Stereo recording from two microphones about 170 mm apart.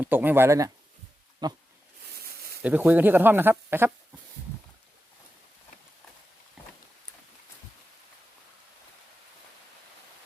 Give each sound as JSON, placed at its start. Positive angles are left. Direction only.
{"t": 0.0, "sound": "speech", "side_deg": -10}
{"t": 2.1, "sound": "a sound", "side_deg": -65}
{"t": 2.6, "sound": "speech", "side_deg": -10}